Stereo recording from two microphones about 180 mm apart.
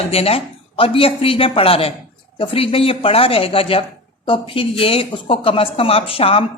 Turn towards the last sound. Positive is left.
turn(degrees=30)  # may be behind; listen again after turning